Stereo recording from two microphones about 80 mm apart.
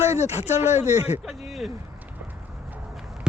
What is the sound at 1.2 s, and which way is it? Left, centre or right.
Speech, centre.